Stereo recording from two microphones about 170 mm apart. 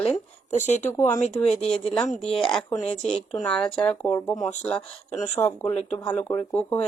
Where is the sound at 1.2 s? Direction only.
40° left (ahead or behind).